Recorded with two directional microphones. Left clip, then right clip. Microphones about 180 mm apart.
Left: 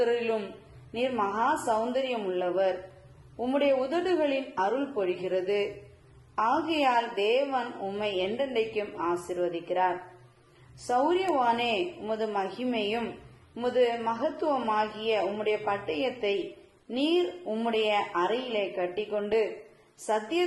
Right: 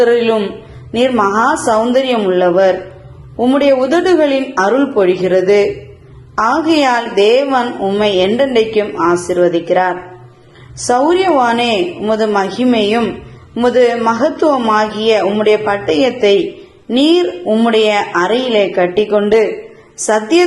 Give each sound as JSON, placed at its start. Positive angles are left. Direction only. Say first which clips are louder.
{"t": 0.0, "sound": "a woman's voice", "louder": "right 16 dB", "side_deg": -30}